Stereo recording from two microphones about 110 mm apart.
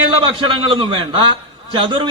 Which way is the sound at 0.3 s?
50° right (ahead or behind).